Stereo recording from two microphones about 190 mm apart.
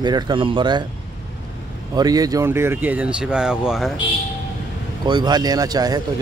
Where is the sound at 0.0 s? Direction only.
25° right (ahead or behind).